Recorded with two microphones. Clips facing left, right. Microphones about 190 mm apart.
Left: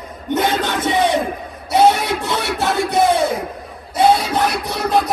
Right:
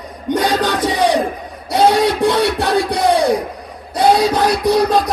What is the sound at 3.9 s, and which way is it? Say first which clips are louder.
Speech: right 2 dB; 25° left (ahead or behind).